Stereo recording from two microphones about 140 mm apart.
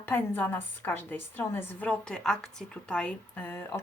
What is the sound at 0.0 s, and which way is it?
A woman's voice, 15° left (ahead or behind).